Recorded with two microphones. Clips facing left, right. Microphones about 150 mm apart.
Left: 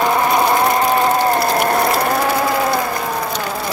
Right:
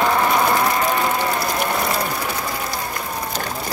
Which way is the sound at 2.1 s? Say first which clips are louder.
Left 9 dB; 90° left.